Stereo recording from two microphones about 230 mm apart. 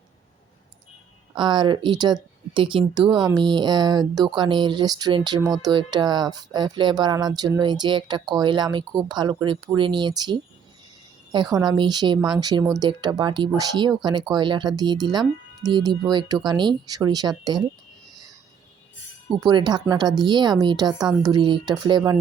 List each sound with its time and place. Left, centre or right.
1.4 s speech: centre
11.5 s speech: centre
19.3 s speech: centre